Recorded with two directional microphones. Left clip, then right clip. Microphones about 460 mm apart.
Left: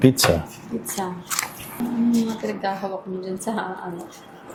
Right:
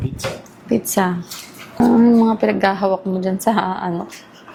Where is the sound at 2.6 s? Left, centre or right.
Right.